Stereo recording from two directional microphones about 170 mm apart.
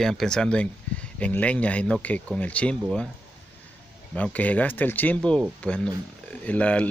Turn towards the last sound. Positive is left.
turn(degrees=5)  # may be behind; listen again after turning